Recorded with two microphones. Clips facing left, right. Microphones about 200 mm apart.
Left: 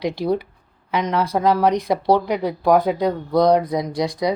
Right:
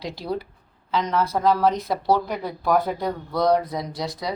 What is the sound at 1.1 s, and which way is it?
Speech, 15° left (ahead or behind).